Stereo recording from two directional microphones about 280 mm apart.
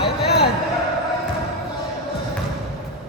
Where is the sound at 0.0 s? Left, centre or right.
Left.